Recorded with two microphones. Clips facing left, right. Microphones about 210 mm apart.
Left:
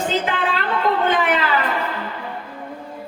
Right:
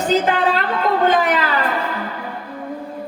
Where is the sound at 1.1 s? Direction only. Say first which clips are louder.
Right 2 dB; 40° right (ahead or behind).